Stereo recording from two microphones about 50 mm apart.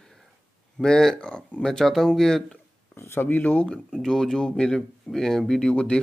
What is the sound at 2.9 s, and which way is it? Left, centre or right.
Speech, left.